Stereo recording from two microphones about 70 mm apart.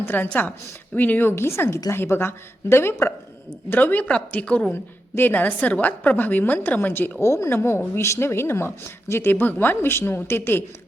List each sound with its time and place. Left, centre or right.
0.0 s a woman's voice: left
4.7 s a woman's voice: left
7.2 s speech: left